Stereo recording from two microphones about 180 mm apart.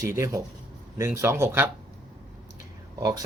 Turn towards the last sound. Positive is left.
turn(degrees=-20)  # may be behind; listen again after turning